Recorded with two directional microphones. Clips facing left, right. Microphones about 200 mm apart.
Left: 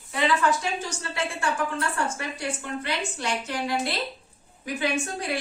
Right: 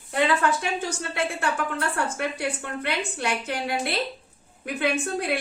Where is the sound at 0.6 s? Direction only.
60° right (ahead or behind).